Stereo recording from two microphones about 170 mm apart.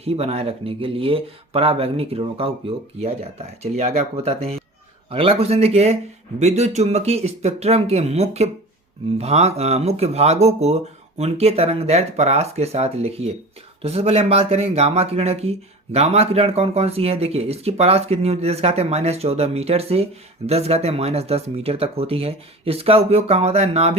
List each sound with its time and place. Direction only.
0.0 s speech: 35° right (ahead or behind)